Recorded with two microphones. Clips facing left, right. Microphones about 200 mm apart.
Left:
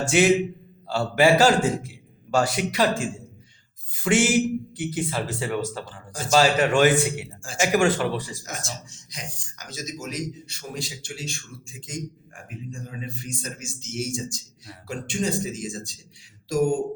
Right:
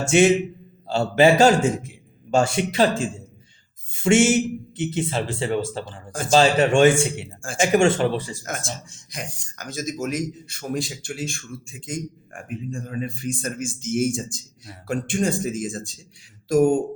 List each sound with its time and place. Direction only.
0.0 s a man's voice: 25° right (ahead or behind)
8.4 s speech: 55° right (ahead or behind)